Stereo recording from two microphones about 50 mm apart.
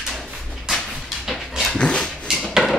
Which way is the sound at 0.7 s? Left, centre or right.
Centre.